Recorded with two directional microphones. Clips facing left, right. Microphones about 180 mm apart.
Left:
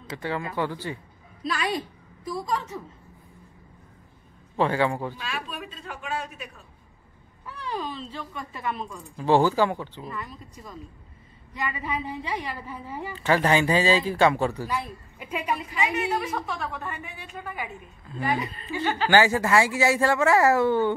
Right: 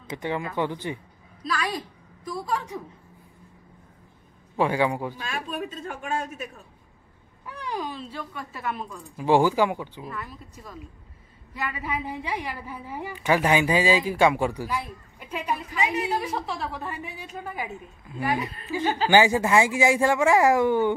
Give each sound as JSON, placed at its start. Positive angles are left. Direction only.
{"t": 0.1, "sound": "speech", "side_deg": -20}
{"t": 1.5, "sound": "a woman's voice", "side_deg": 25}
{"t": 2.2, "sound": "a woman's voice", "side_deg": -5}
{"t": 4.6, "sound": "a woman's voice", "side_deg": -10}
{"t": 5.1, "sound": "a man's voice", "side_deg": -45}
{"t": 7.4, "sound": "a woman's voice", "side_deg": -15}
{"t": 10.0, "sound": "a woman's voice", "side_deg": 0}
{"t": 15.2, "sound": "a woman's voice", "side_deg": 10}
{"t": 16.3, "sound": "a woman's voice", "side_deg": -30}
{"t": 18.0, "sound": "a woman's voice", "side_deg": -10}